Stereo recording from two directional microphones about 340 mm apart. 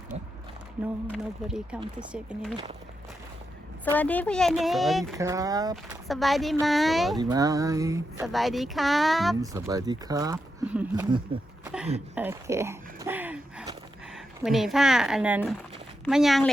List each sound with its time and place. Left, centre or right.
0.1 s speech: centre
1.0 s speech: centre
3.9 s speech: centre
5.7 s speech: centre
7.2 s speech: centre
11.6 s a sound: centre
14.4 s speech: centre